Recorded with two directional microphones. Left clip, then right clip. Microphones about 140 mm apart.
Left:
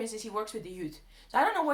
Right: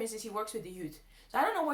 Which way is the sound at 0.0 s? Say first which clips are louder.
Left 2 dB; 30° left (ahead or behind).